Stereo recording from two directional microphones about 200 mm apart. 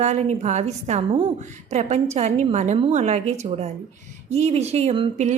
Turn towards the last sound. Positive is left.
turn(degrees=-30)  # may be behind; listen again after turning